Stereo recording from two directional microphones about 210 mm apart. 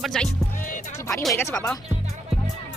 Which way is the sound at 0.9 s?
15° left (ahead or behind).